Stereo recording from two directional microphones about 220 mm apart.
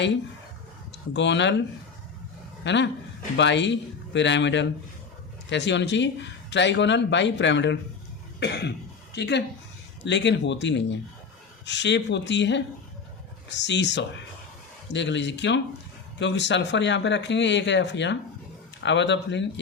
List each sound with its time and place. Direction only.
1.1 s speech: 55° left (ahead or behind)
2.6 s speech: 55° left (ahead or behind)